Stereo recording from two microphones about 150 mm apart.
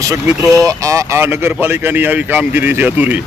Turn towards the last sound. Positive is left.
turn(degrees=-10)  # may be behind; listen again after turning